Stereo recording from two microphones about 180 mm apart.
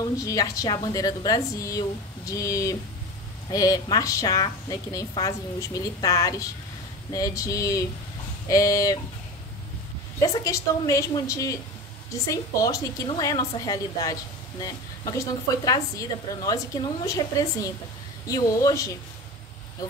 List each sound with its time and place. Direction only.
0.2 s a woman's voice: 20° left (ahead or behind)
10.2 s a woman's voice: 15° left (ahead or behind)